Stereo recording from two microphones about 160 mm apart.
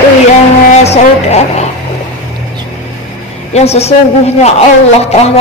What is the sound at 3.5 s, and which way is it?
A woman's voice, 40° left (ahead or behind).